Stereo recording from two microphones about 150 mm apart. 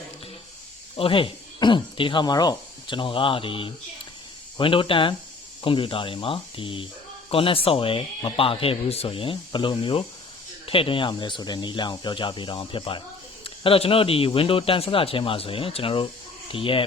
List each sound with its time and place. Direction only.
0.9 s speech: 35° left (ahead or behind)